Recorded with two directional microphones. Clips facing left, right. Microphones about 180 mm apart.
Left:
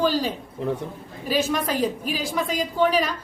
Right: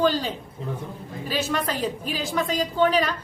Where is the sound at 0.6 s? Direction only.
70° left (ahead or behind).